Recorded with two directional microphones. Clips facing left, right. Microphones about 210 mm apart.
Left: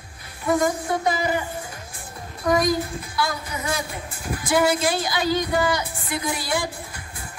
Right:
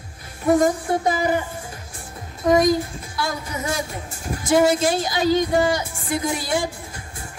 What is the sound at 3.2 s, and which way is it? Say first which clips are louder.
A woman's voice: right 1 dB; 45° right (ahead or behind).